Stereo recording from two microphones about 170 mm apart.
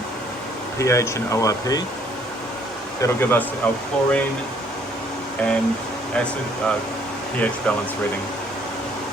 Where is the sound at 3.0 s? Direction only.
15° left (ahead or behind).